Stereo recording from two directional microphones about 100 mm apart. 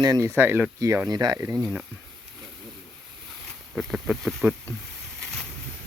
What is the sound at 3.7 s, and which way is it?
Speech, centre (ahead or behind).